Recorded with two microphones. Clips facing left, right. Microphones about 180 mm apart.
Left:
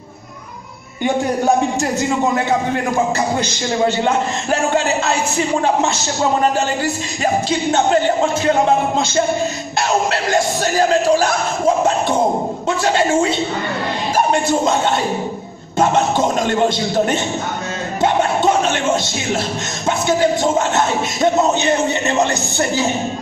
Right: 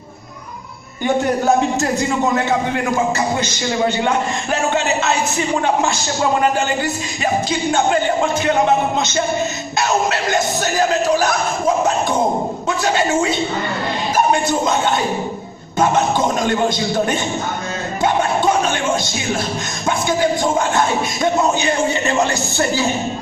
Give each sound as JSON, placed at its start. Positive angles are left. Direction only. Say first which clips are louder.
{"t": 4.0, "sound": "speech", "louder": "left 1 dB", "side_deg": 35}
{"t": 7.4, "sound": "speech", "louder": "left 1 dB", "side_deg": 35}
{"t": 18.0, "sound": "a sound", "louder": "left 1 dB", "side_deg": 25}
{"t": 19.9, "sound": "speech", "louder": "left 2 dB", "side_deg": 25}